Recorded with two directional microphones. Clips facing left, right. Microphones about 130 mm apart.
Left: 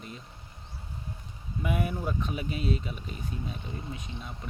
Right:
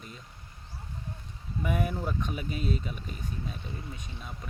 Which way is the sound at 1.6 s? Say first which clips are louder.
Even; 5° left (ahead or behind).